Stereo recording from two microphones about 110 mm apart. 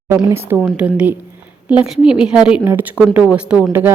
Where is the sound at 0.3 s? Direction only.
20° right (ahead or behind).